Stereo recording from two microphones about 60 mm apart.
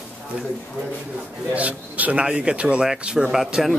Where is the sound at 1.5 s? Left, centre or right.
Right.